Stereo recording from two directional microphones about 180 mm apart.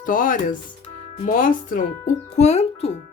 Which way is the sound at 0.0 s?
50° left (ahead or behind).